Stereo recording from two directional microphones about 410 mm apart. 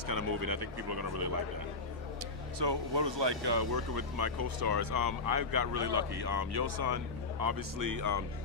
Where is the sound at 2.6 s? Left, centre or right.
Right.